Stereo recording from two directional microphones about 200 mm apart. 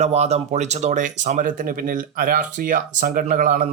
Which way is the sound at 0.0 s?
35° right (ahead or behind).